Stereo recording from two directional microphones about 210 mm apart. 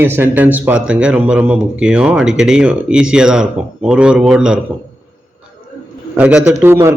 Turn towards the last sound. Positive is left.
turn(degrees=-10)  # may be behind; listen again after turning